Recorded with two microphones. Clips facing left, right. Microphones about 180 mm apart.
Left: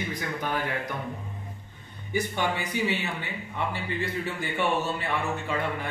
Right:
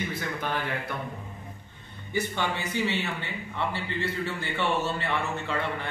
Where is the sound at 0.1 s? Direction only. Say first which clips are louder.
Left 1 dB; 15° left (ahead or behind).